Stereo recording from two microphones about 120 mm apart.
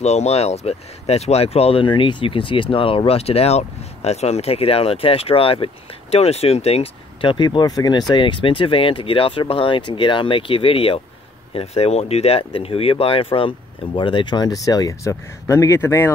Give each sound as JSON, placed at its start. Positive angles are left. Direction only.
{"t": 0.0, "sound": "speech", "side_deg": 65}